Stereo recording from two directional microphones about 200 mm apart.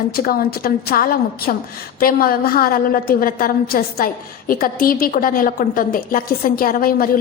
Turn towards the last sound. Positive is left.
turn(degrees=45)  # may be behind; listen again after turning